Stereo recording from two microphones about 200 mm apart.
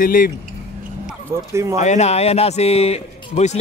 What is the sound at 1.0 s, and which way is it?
Speech, 15° right (ahead or behind).